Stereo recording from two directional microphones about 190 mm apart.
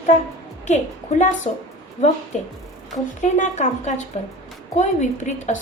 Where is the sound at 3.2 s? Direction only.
40° left (ahead or behind).